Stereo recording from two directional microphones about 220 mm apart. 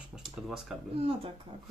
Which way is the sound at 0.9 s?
25° right (ahead or behind).